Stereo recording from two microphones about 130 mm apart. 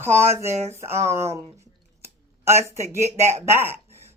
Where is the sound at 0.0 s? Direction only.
20° right (ahead or behind).